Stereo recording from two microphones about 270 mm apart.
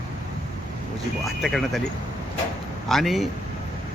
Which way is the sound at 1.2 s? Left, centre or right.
Centre.